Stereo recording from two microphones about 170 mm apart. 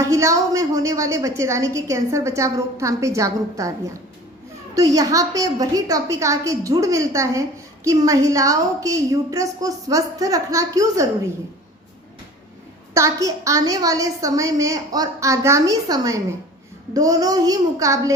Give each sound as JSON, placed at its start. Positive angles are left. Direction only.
{"t": 0.0, "sound": "a woman's voice", "side_deg": -20}
{"t": 4.7, "sound": "a woman's voice", "side_deg": -20}
{"t": 12.9, "sound": "a woman's voice", "side_deg": -20}